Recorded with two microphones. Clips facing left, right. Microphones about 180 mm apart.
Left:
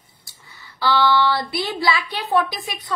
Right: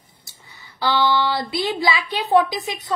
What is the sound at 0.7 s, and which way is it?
Speech, 20° right (ahead or behind).